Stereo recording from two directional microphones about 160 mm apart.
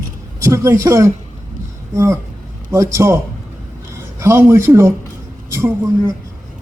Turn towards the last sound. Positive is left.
turn(degrees=-20)  # may be behind; listen again after turning